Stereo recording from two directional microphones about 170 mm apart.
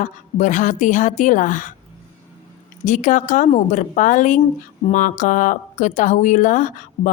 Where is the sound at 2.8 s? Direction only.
45° left (ahead or behind).